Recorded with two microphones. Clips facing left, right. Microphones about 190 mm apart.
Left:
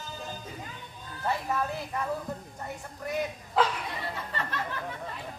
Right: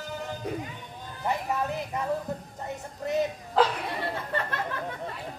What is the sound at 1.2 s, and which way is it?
Music, 20° right (ahead or behind).